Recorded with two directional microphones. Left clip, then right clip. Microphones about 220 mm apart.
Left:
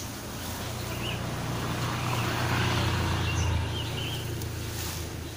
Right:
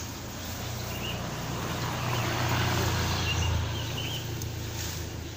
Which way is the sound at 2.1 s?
30° right (ahead or behind).